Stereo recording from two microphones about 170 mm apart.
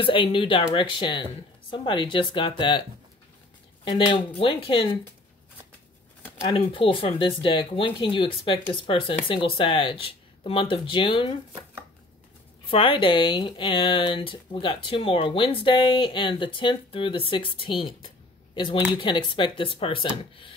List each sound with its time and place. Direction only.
0.0 s speech: 30° left (ahead or behind)
3.8 s speech: 25° left (ahead or behind)
6.4 s speech: 30° left (ahead or behind)
12.6 s speech: 30° left (ahead or behind)